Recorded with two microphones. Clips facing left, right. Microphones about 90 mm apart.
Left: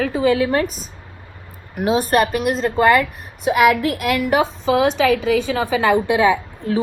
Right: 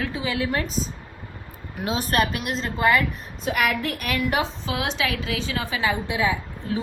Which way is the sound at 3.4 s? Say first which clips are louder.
Left 9 dB; 90° left.